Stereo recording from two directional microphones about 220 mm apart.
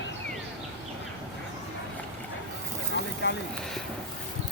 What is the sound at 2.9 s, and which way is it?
Boat, 50° left (ahead or behind).